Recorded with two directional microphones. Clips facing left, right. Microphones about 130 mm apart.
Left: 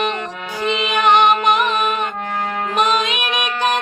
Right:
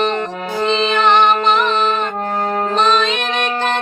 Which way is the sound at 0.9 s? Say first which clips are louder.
Left 1 dB; 15° left (ahead or behind).